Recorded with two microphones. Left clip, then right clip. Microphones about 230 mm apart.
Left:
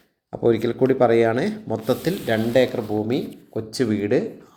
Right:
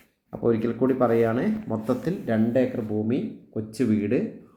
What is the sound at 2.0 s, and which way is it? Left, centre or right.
Speech, left.